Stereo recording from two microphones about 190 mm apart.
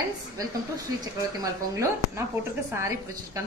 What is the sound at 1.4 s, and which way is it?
Speech, 15° right (ahead or behind).